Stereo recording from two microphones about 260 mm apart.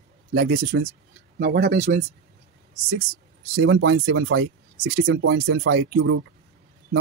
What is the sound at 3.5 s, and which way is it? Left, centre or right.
Speech, right.